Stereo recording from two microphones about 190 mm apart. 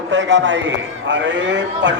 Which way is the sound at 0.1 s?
75° right (ahead or behind).